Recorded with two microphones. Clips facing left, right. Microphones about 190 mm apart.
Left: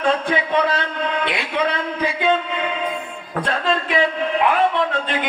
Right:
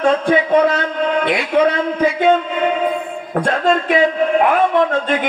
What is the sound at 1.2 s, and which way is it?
A man's voice, 45° right (ahead or behind).